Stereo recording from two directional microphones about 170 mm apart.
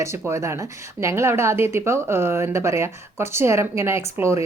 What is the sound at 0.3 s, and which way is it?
Speech, 15° right (ahead or behind).